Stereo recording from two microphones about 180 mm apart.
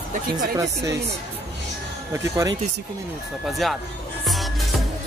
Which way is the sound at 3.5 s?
Centre (ahead or behind).